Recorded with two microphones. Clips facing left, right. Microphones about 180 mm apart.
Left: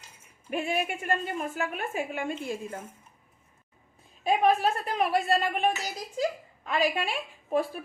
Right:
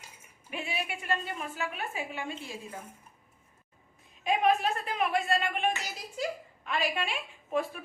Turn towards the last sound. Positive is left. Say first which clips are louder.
# left 4 dB
turn(degrees=35)  # may be behind; listen again after turning